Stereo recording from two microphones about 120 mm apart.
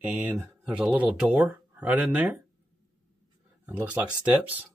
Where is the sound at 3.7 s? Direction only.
15° right (ahead or behind).